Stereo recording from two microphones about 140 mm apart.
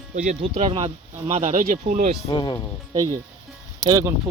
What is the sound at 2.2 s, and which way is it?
Speech, 30° left (ahead or behind).